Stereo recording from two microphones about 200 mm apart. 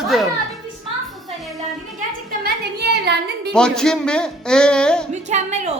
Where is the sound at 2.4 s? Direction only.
55° right (ahead or behind).